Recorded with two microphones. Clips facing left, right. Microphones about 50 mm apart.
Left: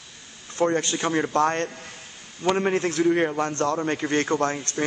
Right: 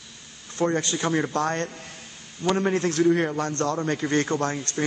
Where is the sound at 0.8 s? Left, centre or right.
Centre.